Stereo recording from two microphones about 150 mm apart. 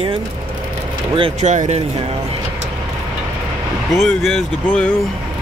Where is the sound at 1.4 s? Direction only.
50° right (ahead or behind).